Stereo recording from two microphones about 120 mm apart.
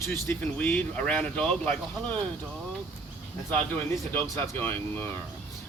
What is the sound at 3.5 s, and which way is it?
Speech, 15° left (ahead or behind).